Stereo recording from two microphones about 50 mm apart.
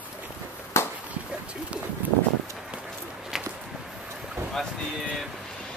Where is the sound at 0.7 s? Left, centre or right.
Left.